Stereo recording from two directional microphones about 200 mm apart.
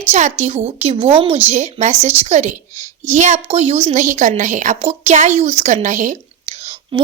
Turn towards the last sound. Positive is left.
turn(degrees=-30)  # may be behind; listen again after turning